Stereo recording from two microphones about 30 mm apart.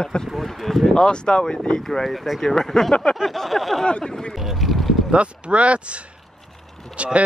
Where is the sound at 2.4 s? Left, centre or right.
Centre.